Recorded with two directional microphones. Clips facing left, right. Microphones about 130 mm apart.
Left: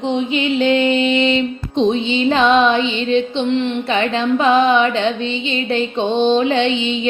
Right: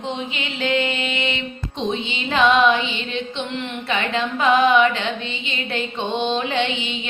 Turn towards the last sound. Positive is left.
turn(degrees=30)  # may be behind; listen again after turning